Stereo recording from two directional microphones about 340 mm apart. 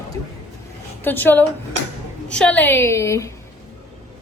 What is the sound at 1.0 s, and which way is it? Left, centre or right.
A woman's voice, centre.